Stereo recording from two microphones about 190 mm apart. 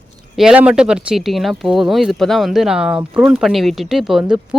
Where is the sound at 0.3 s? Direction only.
5° right (ahead or behind).